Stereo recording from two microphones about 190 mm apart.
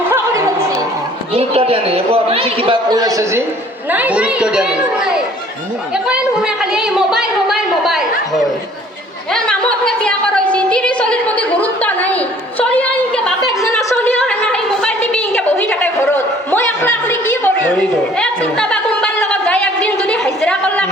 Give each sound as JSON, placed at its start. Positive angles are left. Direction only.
{"t": 0.1, "sound": "music", "side_deg": -15}
{"t": 1.3, "sound": "a man's voice", "side_deg": -30}
{"t": 9.3, "sound": "a sound", "side_deg": 5}